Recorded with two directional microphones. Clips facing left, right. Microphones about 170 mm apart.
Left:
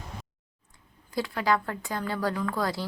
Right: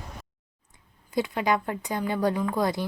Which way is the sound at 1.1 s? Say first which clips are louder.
Right 2 dB; 20° right (ahead or behind).